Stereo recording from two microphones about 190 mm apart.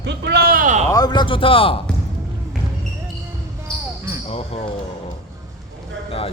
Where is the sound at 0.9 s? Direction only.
20° left (ahead or behind).